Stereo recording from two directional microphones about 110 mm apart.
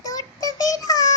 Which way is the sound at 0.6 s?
30° left (ahead or behind).